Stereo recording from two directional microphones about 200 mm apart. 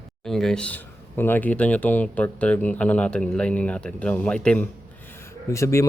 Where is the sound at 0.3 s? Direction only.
Centre (ahead or behind).